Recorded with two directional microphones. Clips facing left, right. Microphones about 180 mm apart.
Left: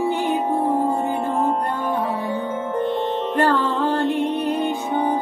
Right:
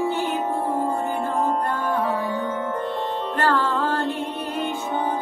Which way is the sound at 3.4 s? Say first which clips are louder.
Left 2 dB; 15° left (ahead or behind).